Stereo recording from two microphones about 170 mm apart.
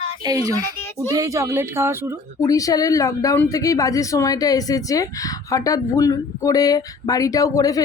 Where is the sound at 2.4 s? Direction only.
20° left (ahead or behind).